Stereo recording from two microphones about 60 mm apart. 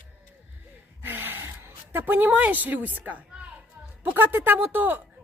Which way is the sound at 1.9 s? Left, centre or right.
Right.